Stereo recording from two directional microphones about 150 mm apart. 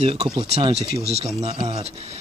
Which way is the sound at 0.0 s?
40° right (ahead or behind).